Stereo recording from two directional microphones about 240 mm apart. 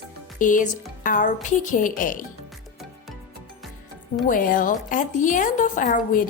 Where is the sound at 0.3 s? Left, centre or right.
Left.